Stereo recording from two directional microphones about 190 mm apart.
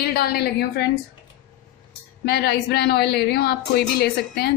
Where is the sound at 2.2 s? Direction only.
55° left (ahead or behind).